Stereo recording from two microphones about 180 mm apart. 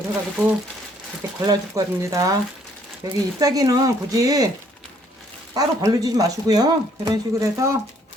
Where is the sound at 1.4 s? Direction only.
20° right (ahead or behind).